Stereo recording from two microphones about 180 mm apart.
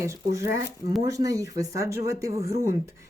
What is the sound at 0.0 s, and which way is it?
A woman's voice, 15° right (ahead or behind).